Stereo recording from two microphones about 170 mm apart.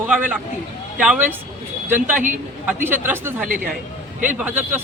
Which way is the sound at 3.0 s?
10° right (ahead or behind).